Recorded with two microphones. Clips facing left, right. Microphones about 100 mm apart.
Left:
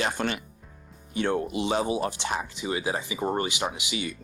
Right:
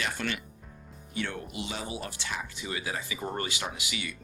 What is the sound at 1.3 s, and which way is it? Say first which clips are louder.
Speech: left 11 dB; 30° left (ahead or behind).